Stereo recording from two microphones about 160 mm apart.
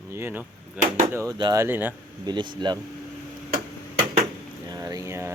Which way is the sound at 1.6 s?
10° right (ahead or behind).